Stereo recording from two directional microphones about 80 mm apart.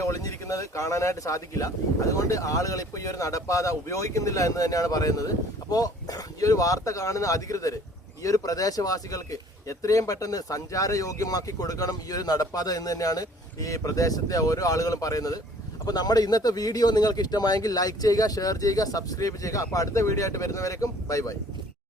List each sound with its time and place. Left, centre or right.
0.0 s speech: left